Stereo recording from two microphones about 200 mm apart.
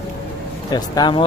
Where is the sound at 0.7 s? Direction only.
20° left (ahead or behind).